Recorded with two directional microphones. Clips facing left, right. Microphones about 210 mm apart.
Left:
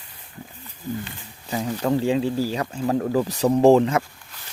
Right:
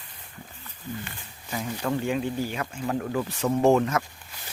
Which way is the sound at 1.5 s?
35° left (ahead or behind).